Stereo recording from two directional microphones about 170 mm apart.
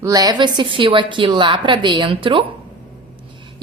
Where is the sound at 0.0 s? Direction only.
20° right (ahead or behind).